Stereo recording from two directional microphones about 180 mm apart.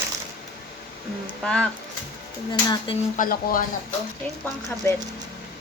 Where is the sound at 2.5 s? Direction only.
25° left (ahead or behind).